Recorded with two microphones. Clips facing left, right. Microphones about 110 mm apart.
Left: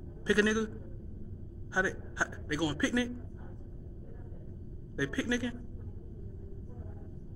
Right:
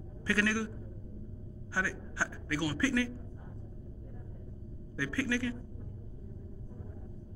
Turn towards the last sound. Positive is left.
turn(degrees=20)  # may be behind; listen again after turning